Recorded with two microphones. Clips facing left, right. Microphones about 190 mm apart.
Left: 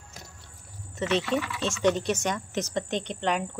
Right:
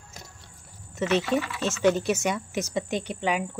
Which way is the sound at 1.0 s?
5° right (ahead or behind).